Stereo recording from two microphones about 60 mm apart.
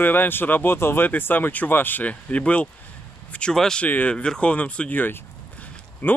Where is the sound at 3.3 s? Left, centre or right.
Centre.